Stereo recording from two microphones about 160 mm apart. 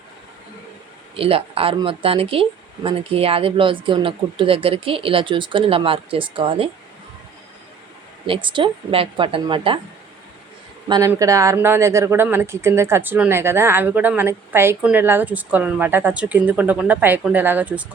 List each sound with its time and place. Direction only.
1.1 s speech: 35° right (ahead or behind)
8.3 s speech: 30° right (ahead or behind)
10.8 s speech: 25° right (ahead or behind); by 17.8 s 10° right (ahead or behind)